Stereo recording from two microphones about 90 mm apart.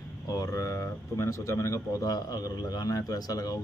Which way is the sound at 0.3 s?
40° left (ahead or behind).